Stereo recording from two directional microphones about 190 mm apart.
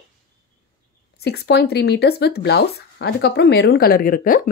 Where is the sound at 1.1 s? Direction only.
60° left (ahead or behind).